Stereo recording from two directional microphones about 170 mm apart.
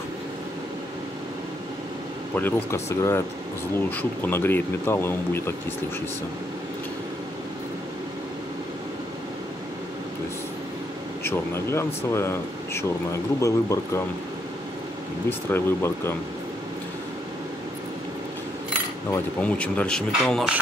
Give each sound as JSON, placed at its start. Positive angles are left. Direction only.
{"t": 2.3, "sound": "speech", "side_deg": 10}
{"t": 11.2, "sound": "speech", "side_deg": 15}
{"t": 15.2, "sound": "speech", "side_deg": 15}
{"t": 19.0, "sound": "speech", "side_deg": 10}